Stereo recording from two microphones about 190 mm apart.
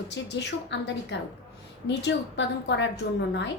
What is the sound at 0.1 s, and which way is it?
A woman's voice, 65° left (ahead or behind).